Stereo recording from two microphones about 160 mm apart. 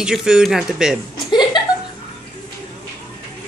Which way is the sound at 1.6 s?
30° left (ahead or behind).